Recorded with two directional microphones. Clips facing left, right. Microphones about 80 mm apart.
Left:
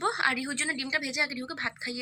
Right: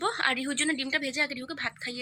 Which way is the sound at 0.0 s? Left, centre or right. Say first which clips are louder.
Even; centre.